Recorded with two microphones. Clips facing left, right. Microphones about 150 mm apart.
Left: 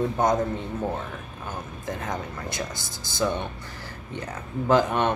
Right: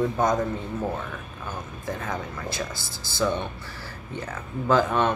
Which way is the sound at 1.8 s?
20° left (ahead or behind).